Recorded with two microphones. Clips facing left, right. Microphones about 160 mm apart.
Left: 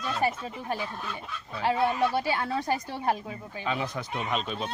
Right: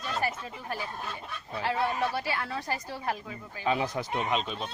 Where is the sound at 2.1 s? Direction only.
20° left (ahead or behind).